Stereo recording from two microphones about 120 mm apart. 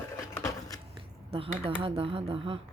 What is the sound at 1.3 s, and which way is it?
Speech, 50° right (ahead or behind).